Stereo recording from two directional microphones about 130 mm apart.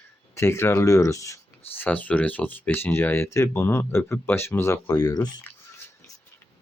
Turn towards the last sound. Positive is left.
turn(degrees=30)  # may be behind; listen again after turning